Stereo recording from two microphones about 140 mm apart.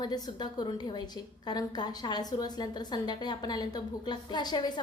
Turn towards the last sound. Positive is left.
turn(degrees=30)  # may be behind; listen again after turning